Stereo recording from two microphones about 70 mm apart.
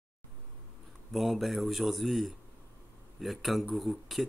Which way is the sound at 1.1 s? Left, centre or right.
Centre.